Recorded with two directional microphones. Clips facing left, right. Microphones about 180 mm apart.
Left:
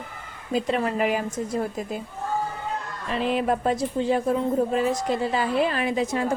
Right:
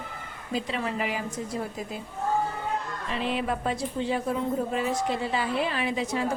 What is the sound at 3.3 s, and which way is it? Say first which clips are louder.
A woman's voice: left 7 dB; 45° left (ahead or behind).